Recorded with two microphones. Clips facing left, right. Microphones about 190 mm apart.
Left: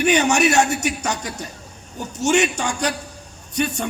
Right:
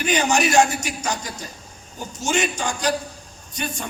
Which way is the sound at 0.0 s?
70° left (ahead or behind).